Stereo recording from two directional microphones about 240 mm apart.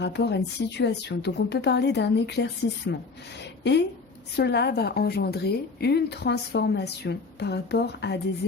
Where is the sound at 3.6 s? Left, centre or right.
Left.